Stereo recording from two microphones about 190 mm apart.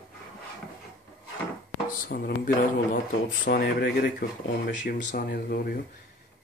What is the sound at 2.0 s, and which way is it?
Speech, 50° left (ahead or behind).